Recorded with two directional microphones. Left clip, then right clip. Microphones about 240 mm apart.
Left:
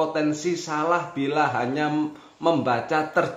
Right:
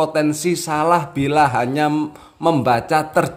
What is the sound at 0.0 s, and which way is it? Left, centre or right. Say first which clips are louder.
A man's voice: right 6 dB; right.